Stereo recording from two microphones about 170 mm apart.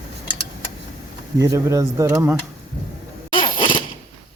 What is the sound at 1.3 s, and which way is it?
Speech, 20° right (ahead or behind).